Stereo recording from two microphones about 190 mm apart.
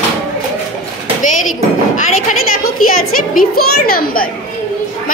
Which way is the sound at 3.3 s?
50° left (ahead or behind).